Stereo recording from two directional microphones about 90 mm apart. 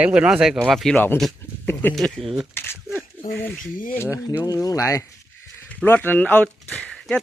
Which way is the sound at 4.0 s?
30° left (ahead or behind).